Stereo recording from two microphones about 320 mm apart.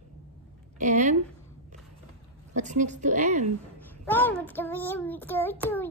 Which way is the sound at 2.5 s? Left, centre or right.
Right.